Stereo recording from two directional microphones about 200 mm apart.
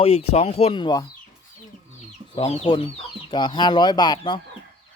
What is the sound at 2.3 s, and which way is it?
Speech, 30° left (ahead or behind).